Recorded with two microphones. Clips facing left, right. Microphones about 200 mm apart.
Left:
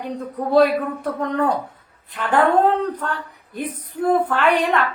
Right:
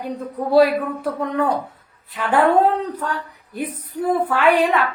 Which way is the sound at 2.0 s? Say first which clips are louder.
Even; 5° right (ahead or behind).